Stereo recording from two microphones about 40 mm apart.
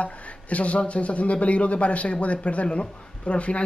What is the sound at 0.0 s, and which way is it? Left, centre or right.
Speech, left.